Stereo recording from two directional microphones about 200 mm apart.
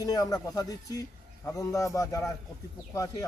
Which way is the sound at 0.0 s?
15° left (ahead or behind).